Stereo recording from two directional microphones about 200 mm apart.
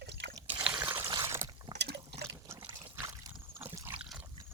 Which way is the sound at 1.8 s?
55° right (ahead or behind).